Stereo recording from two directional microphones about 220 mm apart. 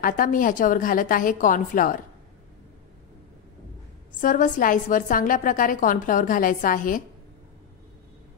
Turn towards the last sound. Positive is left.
turn(degrees=40)  # may be behind; listen again after turning